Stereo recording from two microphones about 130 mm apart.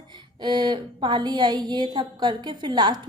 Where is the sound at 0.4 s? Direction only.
35° right (ahead or behind).